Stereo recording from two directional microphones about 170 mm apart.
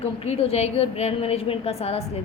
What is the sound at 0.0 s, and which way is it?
A woman's voice, 35° left (ahead or behind).